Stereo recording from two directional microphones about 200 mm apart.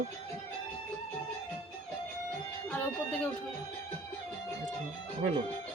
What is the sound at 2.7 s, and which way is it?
Speech, 5° left (ahead or behind).